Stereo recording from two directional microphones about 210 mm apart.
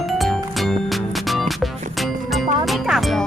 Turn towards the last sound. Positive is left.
turn(degrees=0)  # may be behind; listen again after turning